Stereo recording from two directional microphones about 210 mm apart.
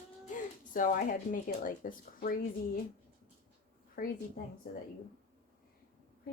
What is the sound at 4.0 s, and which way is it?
Speech, 40° left (ahead or behind).